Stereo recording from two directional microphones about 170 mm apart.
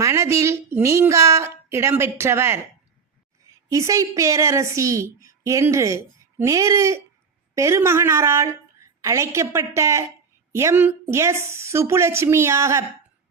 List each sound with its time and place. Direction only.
0.0 s a woman's voice: 15° right (ahead or behind)
3.7 s a woman's voice: 20° right (ahead or behind)